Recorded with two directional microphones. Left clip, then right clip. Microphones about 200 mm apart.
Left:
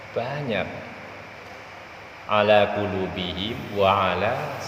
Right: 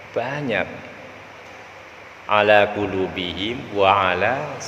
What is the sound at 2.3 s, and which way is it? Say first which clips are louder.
A man's voice: right 3 dB; 25° right (ahead or behind).